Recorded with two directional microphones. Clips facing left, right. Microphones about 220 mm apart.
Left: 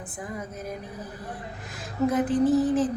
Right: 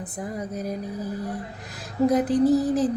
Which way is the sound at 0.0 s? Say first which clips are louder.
Right 4 dB; 40° right (ahead or behind).